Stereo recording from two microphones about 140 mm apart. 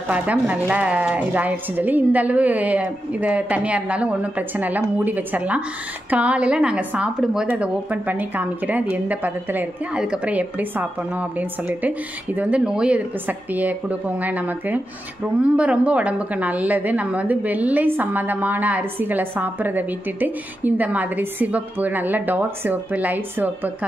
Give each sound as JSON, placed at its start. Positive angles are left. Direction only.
{"t": 0.1, "sound": "a woman's voice", "side_deg": -10}